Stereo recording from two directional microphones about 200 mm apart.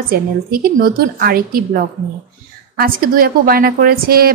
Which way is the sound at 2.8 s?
45° right (ahead or behind).